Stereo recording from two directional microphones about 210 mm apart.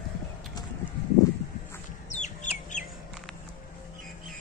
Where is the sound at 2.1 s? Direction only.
35° left (ahead or behind).